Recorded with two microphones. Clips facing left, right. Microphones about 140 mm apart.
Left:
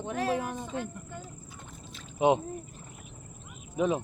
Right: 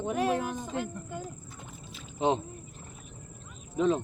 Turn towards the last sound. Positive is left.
turn(degrees=10)  # may be behind; listen again after turning